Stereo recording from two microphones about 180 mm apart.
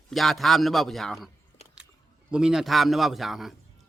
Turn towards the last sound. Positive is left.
turn(degrees=0)  # may be behind; listen again after turning